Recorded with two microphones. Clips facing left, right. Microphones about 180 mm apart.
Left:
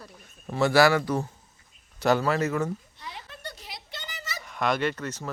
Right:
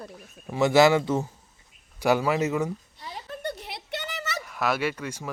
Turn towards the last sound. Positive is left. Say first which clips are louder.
# even
turn(degrees=-10)  # may be behind; listen again after turning